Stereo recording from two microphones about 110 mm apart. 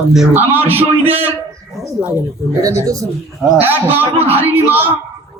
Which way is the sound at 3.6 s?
20° right (ahead or behind).